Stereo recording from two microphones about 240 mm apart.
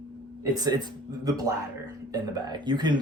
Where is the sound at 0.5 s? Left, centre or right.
Centre.